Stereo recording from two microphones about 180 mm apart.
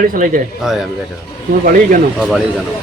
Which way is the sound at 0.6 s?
Centre (ahead or behind).